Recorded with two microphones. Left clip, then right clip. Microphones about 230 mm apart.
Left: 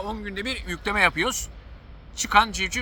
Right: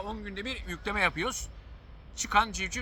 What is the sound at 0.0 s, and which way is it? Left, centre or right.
Speech, centre.